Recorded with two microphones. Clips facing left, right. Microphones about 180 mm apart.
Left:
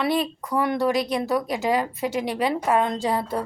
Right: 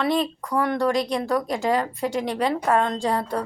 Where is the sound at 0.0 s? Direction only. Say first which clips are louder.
Right 1 dB; 5° left (ahead or behind).